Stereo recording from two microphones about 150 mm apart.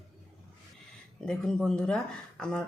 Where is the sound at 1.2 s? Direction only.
5° left (ahead or behind).